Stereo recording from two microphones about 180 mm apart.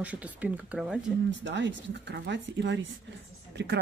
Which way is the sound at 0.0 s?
5° right (ahead or behind).